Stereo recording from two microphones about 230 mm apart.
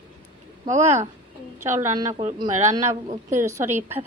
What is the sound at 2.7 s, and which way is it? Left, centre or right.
Speech, right.